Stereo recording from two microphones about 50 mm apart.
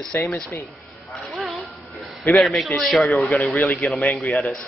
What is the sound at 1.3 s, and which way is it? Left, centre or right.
Music, centre.